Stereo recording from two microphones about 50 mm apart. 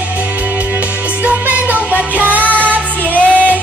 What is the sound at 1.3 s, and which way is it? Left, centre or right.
Music, right.